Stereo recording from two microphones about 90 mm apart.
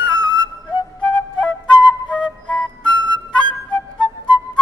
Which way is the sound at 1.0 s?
15° left (ahead or behind).